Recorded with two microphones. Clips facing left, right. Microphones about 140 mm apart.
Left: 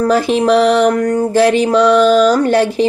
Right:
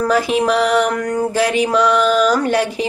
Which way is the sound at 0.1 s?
30° left (ahead or behind).